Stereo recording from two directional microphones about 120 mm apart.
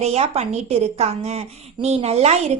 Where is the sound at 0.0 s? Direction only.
65° right (ahead or behind).